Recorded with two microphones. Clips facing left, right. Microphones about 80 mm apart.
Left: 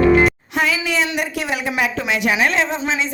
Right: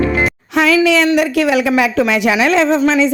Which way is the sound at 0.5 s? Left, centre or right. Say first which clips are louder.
Right 7 dB; right.